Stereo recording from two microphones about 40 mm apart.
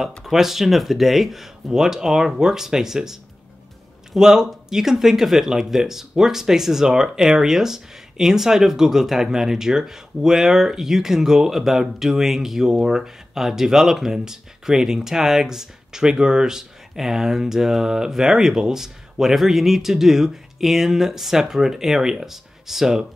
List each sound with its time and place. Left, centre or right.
0.2 s speech: centre
4.2 s speech: centre